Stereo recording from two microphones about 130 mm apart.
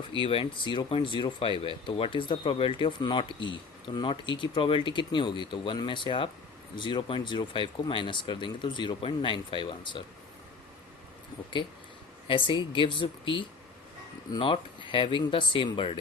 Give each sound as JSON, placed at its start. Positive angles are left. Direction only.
{"t": 0.1, "sound": "speech", "side_deg": 45}
{"t": 12.3, "sound": "speech", "side_deg": 40}